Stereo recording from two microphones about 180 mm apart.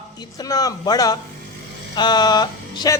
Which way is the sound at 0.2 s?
20° left (ahead or behind).